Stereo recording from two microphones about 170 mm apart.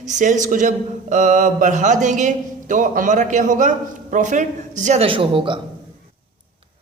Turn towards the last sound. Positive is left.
turn(degrees=-30)  # may be behind; listen again after turning